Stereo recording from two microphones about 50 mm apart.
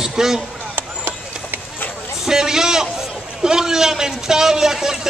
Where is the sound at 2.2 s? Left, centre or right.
Centre.